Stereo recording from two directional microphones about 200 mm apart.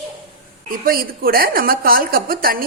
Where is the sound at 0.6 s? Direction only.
45° right (ahead or behind).